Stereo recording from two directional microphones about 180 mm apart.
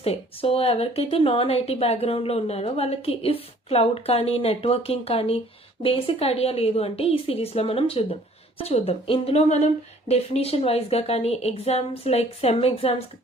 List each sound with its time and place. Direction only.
0.0 s speech: 35° left (ahead or behind)